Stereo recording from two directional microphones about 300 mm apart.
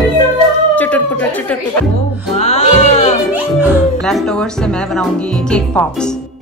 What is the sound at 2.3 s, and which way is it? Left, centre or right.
Music, left.